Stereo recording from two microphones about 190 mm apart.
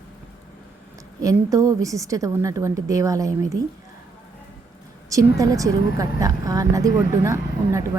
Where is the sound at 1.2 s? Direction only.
15° right (ahead or behind).